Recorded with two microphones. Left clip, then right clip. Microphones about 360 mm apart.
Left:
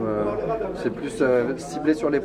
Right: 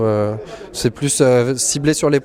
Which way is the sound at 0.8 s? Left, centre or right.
Right.